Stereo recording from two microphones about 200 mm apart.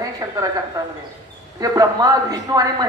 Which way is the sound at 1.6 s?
20° right (ahead or behind).